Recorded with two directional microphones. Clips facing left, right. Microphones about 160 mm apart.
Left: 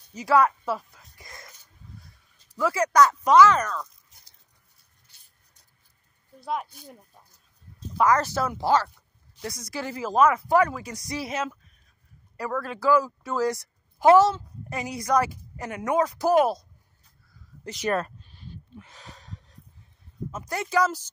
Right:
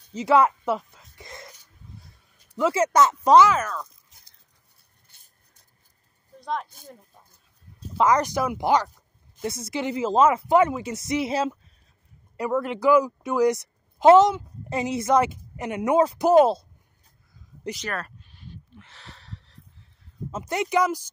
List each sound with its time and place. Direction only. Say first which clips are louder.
0.1 s a sound: right 2 dB; 25° right (ahead or behind)
2.5 s speech: right 1 dB; 25° right (ahead or behind)
3.4 s speech: left 1 dB; 5° right (ahead or behind)
5.0 s a sound: right 2 dB; 50° right (ahead or behind)
6.4 s speech: even; 10° left (ahead or behind)
8.0 s speech: right 1 dB; 20° right (ahead or behind)
17.8 s speech: left 9 dB; 25° left (ahead or behind)
18.8 s a sound: left 2 dB; 15° left (ahead or behind)
20.2 s speech: right 5 dB; 25° right (ahead or behind)